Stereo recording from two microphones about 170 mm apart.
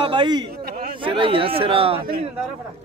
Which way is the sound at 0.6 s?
60° right (ahead or behind).